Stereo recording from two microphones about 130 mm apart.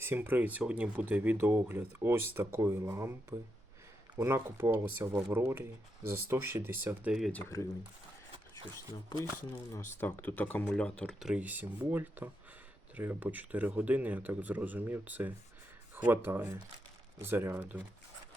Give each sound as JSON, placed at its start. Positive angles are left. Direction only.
{"t": 0.0, "sound": "speech", "side_deg": -15}
{"t": 10.0, "sound": "speech", "side_deg": 15}
{"t": 11.3, "sound": "speech", "side_deg": -10}